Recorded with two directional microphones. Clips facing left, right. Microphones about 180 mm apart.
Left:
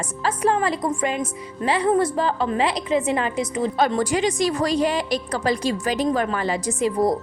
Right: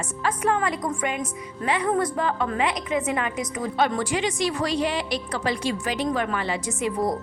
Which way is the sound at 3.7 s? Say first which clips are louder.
Left 2 dB; 40° left (ahead or behind).